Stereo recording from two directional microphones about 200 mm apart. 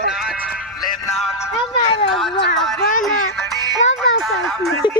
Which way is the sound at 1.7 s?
25° left (ahead or behind).